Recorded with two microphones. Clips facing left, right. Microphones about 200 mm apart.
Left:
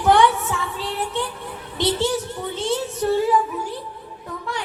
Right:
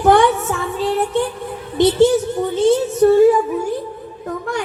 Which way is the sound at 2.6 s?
50° right (ahead or behind).